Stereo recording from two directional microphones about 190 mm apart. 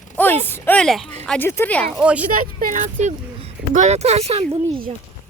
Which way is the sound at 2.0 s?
5° right (ahead or behind).